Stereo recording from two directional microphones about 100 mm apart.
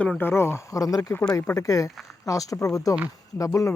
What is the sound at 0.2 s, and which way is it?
Speech, 25° left (ahead or behind).